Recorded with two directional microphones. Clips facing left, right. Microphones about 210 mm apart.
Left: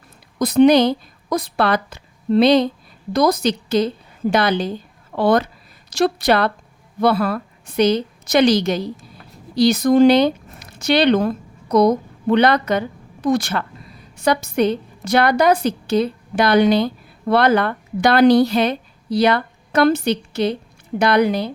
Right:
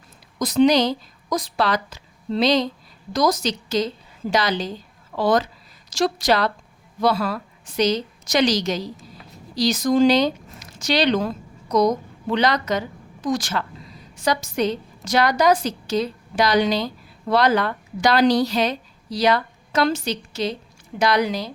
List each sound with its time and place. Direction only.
0.3 s a woman's voice: 60° left (ahead or behind)